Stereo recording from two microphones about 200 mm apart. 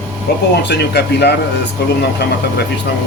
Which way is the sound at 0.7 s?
55° left (ahead or behind).